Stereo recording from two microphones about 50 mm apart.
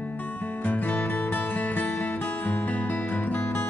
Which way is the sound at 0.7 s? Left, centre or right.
Left.